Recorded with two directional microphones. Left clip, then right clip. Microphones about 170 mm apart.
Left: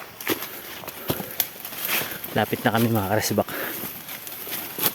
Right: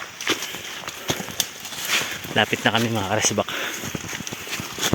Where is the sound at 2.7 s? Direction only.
30° left (ahead or behind).